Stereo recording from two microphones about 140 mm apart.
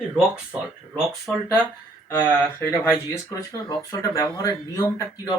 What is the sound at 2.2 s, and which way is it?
Speech, 15° left (ahead or behind).